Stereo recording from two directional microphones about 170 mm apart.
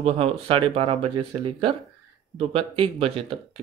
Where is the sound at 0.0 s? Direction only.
35° right (ahead or behind).